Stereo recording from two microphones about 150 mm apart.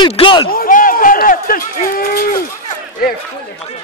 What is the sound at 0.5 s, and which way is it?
Run, 70° left (ahead or behind).